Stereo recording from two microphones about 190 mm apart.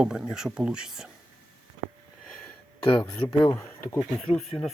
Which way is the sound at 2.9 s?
25° left (ahead or behind).